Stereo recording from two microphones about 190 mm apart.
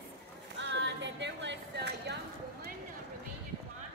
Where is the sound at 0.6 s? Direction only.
65° right (ahead or behind).